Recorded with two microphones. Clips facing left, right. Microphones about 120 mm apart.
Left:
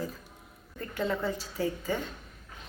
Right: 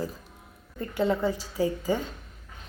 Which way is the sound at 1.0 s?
15° right (ahead or behind).